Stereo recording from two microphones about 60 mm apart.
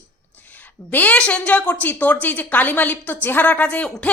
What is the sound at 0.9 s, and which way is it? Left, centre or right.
A woman's voice, left.